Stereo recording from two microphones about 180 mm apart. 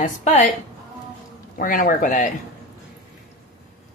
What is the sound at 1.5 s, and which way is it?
Speech, 50° left (ahead or behind).